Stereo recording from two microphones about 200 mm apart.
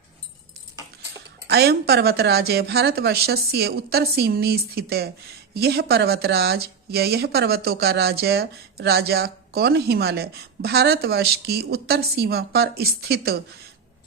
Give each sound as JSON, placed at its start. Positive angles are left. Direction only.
{"t": 1.5, "sound": "speech", "side_deg": -55}